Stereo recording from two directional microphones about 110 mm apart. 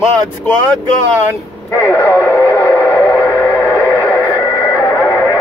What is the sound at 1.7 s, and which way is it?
Radio, 25° left (ahead or behind).